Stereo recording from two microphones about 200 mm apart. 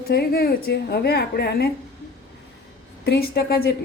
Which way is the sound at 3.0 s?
50° left (ahead or behind).